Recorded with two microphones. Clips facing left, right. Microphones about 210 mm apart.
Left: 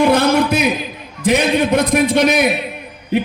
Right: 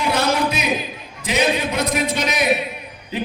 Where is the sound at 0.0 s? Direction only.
55° left (ahead or behind).